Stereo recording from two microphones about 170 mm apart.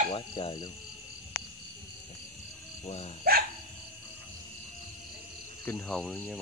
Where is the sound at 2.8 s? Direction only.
40° left (ahead or behind).